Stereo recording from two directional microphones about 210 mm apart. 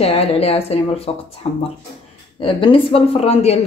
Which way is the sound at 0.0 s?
30° left (ahead or behind).